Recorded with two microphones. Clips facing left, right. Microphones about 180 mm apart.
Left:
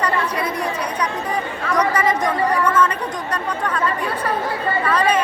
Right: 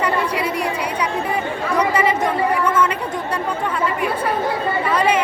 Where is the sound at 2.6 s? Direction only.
10° right (ahead or behind).